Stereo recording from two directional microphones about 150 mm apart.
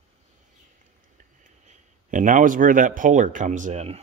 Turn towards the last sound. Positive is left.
turn(degrees=-50)  # may be behind; listen again after turning